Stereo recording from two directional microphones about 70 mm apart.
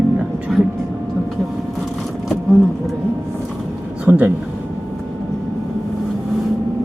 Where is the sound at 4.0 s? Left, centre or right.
Centre.